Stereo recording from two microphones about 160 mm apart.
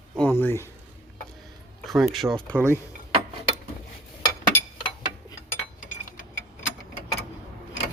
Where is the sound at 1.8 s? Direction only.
Centre (ahead or behind).